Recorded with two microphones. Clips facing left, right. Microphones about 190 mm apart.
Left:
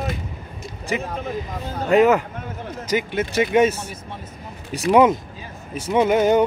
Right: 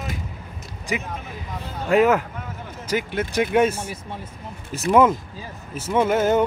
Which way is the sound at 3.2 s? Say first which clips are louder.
Left 2 dB; 5° left (ahead or behind).